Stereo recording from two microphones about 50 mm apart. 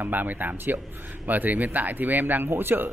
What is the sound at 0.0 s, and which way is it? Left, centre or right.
Speech, right.